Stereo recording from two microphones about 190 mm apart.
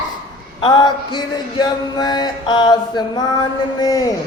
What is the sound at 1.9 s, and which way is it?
Mantra, 20° left (ahead or behind).